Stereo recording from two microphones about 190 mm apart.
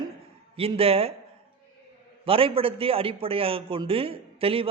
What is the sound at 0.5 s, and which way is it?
Speech, 30° right (ahead or behind).